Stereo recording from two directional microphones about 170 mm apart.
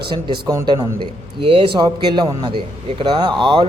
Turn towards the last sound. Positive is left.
turn(degrees=-30)  # may be behind; listen again after turning